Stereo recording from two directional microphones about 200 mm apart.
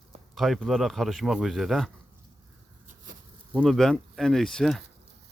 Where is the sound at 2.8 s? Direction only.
45° right (ahead or behind).